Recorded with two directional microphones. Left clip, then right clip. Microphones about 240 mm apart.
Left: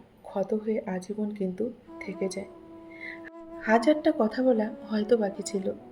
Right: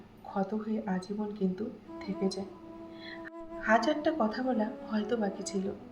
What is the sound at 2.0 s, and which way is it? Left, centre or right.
Speech, centre.